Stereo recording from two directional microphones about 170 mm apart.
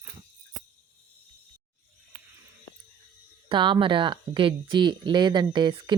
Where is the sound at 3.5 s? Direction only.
30° right (ahead or behind).